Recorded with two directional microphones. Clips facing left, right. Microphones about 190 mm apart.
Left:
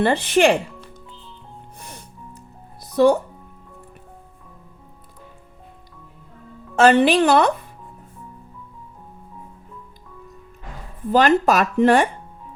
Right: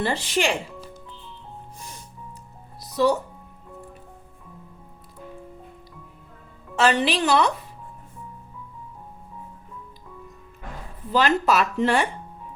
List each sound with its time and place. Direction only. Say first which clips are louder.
0.0 s speech: left 8 dB; 60° left (ahead or behind)
2.8 s music: left 6 dB; 55° left (ahead or behind)
6.7 s speech: left 7 dB; 50° left (ahead or behind)
11.1 s speech: left 5 dB; 50° left (ahead or behind)